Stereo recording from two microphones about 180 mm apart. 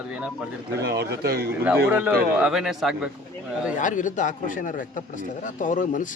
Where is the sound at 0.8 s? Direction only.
65° right (ahead or behind).